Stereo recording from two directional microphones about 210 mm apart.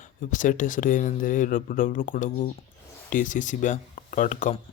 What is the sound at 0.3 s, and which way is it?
Speech, 40° left (ahead or behind).